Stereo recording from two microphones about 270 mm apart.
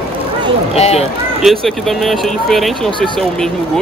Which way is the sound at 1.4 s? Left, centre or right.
Centre.